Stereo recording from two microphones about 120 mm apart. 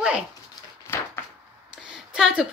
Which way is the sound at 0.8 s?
20° left (ahead or behind).